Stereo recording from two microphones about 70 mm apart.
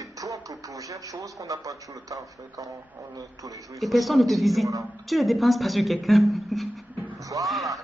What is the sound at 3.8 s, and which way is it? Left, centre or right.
A woman's voice, centre.